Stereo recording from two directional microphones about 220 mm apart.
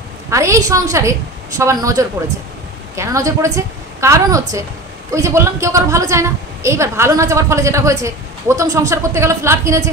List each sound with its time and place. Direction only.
0.3 s a woman's voice: 15° right (ahead or behind)